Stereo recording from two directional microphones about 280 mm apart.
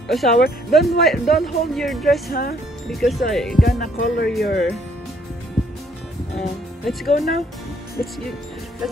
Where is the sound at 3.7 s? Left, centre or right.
Left.